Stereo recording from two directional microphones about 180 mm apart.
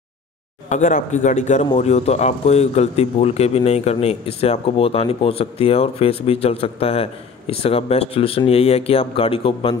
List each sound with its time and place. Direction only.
0.7 s a man's voice: 40° left (ahead or behind)